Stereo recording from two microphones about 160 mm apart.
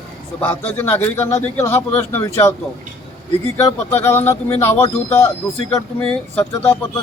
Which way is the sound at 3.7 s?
15° left (ahead or behind).